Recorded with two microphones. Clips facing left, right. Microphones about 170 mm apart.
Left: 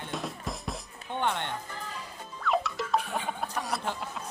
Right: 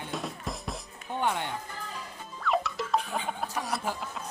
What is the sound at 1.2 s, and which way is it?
Speech, 5° right (ahead or behind).